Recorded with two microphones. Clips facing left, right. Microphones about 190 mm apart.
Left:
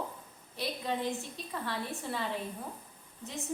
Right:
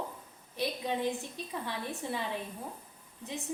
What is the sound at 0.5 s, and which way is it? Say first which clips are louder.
A woman's voice: right 2 dB; 15° right (ahead or behind).